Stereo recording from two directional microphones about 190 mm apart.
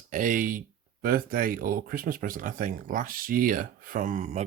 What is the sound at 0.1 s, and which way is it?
Speech, 45° right (ahead or behind).